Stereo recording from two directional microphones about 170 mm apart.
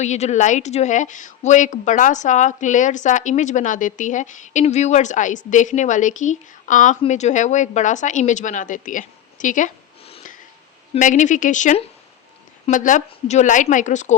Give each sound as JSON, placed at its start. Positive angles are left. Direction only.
{"t": 0.0, "sound": "a woman's voice", "side_deg": 40}
{"t": 10.9, "sound": "a woman's voice", "side_deg": 45}